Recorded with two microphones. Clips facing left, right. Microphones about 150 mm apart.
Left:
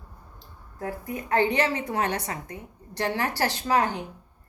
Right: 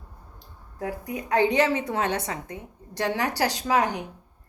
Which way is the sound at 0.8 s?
15° right (ahead or behind).